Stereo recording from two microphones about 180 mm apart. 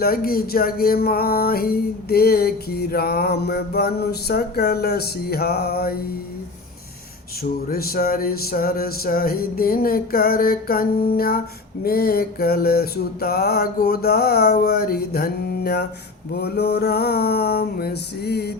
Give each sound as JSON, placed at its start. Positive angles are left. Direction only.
{"t": 0.0, "sound": "music", "side_deg": 55}
{"t": 7.7, "sound": "music", "side_deg": 55}